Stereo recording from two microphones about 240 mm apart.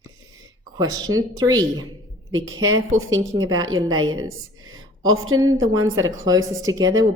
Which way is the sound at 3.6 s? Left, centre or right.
Right.